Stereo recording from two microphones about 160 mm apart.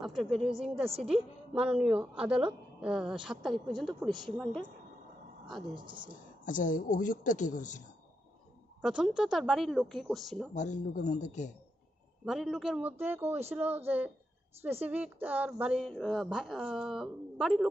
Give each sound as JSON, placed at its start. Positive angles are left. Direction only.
{"t": 0.0, "sound": "a sound", "side_deg": 0}
{"t": 0.6, "sound": "a woman's voice", "side_deg": -35}
{"t": 1.0, "sound": "a woman's voice", "side_deg": -5}
{"t": 5.8, "sound": "a woman's voice", "side_deg": -30}
{"t": 6.4, "sound": "speech", "side_deg": 55}
{"t": 8.8, "sound": "a woman's voice", "side_deg": -5}
{"t": 10.5, "sound": "speech", "side_deg": 50}
{"t": 12.3, "sound": "a woman's voice", "side_deg": 0}